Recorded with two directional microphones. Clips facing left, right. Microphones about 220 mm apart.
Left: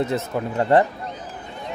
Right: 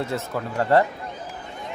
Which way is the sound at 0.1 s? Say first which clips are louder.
Left 3 dB; 20° left (ahead or behind).